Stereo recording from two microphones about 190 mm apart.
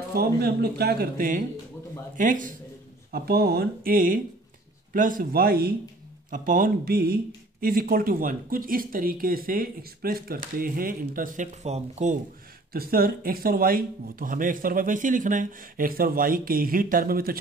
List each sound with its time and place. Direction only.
0.1 s speech: 55° right (ahead or behind)
3.1 s speech: 55° right (ahead or behind); by 12.2 s 40° right (ahead or behind)
12.7 s speech: 50° right (ahead or behind)